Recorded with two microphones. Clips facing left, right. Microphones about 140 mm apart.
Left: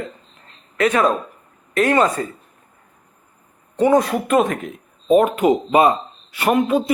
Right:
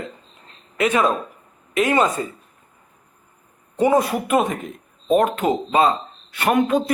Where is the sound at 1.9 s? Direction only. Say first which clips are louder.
Left 2 dB; 20° right (ahead or behind).